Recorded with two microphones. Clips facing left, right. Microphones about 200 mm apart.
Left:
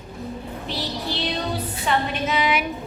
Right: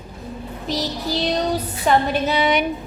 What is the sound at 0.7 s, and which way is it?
Female singing, 40° right (ahead or behind).